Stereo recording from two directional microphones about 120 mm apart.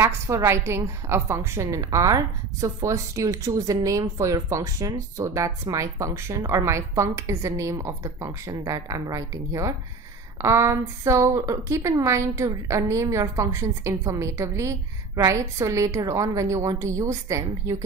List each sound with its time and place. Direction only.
0.3 s a woman's voice: 30° right (ahead or behind)
0.7 s a woman's voice: 20° right (ahead or behind)